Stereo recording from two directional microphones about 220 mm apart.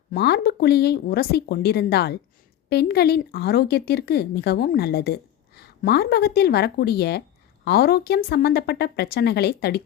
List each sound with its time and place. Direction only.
0.1 s speech: 45° left (ahead or behind)